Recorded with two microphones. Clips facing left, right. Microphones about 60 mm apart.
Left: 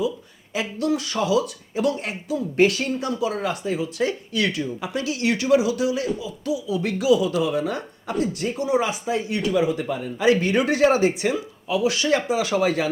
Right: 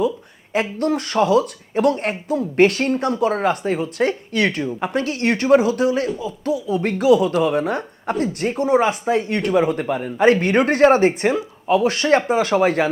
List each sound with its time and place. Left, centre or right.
0.5 s speech: right